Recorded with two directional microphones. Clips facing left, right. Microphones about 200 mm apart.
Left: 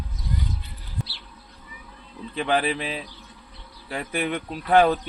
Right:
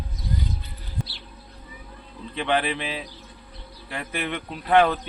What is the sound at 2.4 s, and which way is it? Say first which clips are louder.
A man's voice: left 1 dB; centre (ahead or behind).